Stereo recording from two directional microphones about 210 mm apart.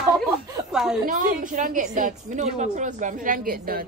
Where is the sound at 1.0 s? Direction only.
40° right (ahead or behind).